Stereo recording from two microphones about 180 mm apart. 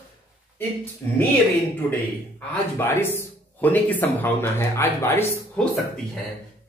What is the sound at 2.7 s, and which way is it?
A man's voice, 15° left (ahead or behind).